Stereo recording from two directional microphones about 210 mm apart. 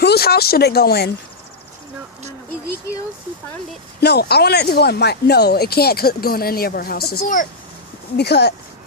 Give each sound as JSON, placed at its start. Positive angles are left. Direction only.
{"t": 0.0, "sound": "speech", "side_deg": 50}
{"t": 4.0, "sound": "speech", "side_deg": 50}